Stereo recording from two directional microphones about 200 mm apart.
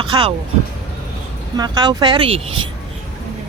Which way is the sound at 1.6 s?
20° right (ahead or behind).